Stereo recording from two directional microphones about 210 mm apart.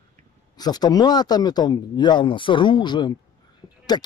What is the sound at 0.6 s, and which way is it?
Speech, 20° left (ahead or behind).